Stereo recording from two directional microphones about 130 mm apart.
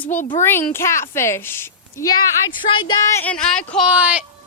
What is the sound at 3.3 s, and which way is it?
Speech, 5° left (ahead or behind).